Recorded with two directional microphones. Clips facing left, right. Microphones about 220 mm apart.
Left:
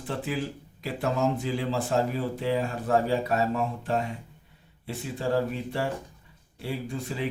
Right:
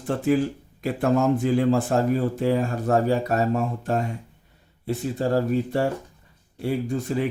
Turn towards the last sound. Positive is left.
turn(degrees=-45)  # may be behind; listen again after turning